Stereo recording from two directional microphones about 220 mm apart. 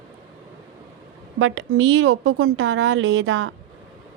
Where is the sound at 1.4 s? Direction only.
65° right (ahead or behind).